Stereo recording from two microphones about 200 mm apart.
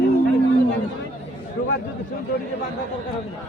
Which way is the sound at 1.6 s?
60° left (ahead or behind).